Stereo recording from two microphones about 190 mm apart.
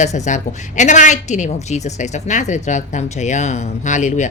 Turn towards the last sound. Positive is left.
turn(degrees=40)  # may be behind; listen again after turning